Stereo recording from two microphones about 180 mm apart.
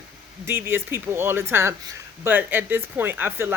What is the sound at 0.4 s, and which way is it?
Speech, 15° right (ahead or behind).